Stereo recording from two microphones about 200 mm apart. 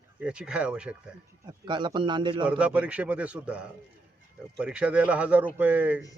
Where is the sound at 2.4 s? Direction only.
5° right (ahead or behind).